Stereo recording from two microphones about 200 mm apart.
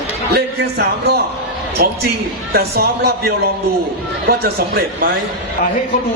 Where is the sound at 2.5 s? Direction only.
50° right (ahead or behind).